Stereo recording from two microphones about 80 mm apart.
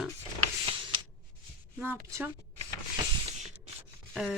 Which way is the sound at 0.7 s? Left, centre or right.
Right.